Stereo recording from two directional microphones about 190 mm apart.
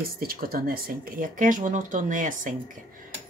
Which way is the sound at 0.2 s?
50° right (ahead or behind).